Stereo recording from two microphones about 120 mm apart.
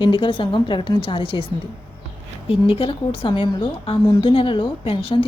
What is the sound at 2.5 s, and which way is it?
Speech, 50° left (ahead or behind).